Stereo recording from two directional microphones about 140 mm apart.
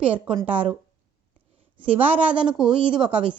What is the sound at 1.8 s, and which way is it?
Speech, 40° right (ahead or behind).